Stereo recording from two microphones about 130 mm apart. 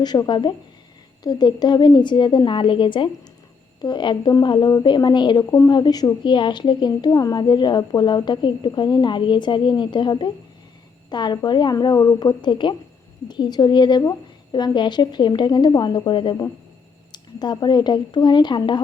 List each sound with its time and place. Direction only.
0.0 s a woman's voice: 35° left (ahead or behind)